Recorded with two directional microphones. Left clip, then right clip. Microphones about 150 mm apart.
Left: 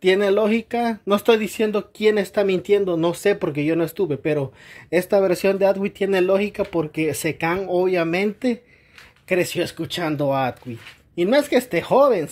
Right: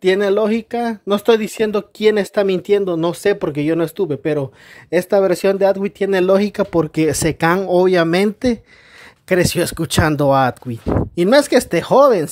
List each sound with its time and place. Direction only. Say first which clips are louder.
0.0 s speech: right 3 dB; 30° right (ahead or behind)
1.6 s speech: right 4 dB; 45° right (ahead or behind)